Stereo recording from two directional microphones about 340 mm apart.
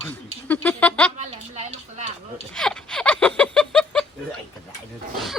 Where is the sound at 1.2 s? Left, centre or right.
Centre.